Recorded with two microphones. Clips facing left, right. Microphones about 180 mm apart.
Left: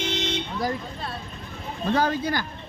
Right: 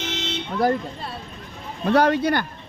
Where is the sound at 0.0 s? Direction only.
15° left (ahead or behind).